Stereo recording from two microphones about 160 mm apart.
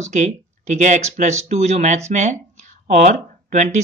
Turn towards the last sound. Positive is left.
turn(degrees=-45)  # may be behind; listen again after turning